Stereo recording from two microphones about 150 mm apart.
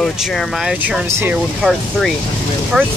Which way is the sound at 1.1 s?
15° right (ahead or behind).